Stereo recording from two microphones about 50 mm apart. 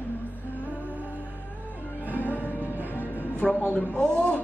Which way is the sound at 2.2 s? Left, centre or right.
Left.